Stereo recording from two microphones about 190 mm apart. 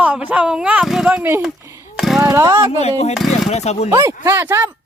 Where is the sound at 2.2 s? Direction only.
15° right (ahead or behind).